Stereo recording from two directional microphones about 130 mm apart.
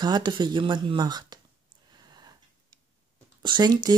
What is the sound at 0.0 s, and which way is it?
Speech, 35° right (ahead or behind).